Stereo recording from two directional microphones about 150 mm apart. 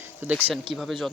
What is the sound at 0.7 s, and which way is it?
Speech, centre (ahead or behind).